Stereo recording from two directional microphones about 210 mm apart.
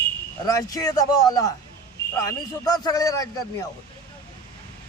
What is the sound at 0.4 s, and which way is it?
A man's voice, 15° left (ahead or behind).